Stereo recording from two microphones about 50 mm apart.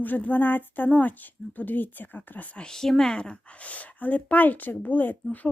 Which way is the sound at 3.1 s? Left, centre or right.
Left.